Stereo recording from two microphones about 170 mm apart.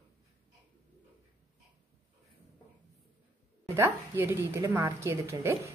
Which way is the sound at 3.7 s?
15° right (ahead or behind).